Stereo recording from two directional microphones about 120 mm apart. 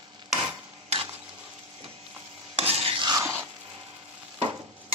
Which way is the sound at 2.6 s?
55° right (ahead or behind).